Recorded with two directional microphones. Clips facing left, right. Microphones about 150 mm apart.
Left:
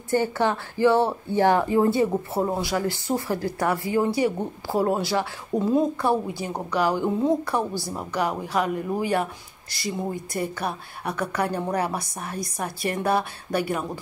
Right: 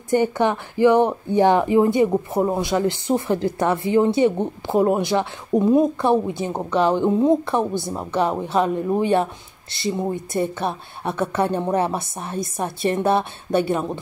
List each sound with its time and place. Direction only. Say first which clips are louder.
0.1 s speech: right 4 dB; 20° right (ahead or behind)